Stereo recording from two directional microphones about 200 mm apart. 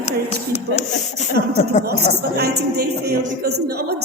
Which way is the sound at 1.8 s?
55° right (ahead or behind).